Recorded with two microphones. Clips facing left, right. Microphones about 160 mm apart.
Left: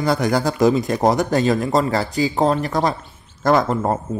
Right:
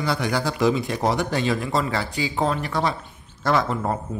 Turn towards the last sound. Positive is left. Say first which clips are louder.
# left 5 dB
turn(degrees=45)  # may be behind; listen again after turning